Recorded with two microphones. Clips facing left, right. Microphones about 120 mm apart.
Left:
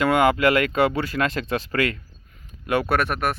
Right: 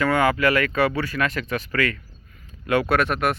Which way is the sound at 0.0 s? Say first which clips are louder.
Left 2 dB; 25° left (ahead or behind).